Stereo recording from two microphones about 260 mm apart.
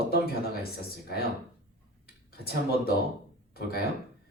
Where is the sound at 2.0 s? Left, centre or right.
Left.